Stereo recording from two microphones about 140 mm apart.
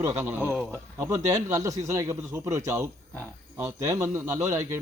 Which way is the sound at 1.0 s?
25° right (ahead or behind).